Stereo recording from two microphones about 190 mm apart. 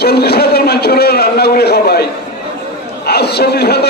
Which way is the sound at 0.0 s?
55° left (ahead or behind).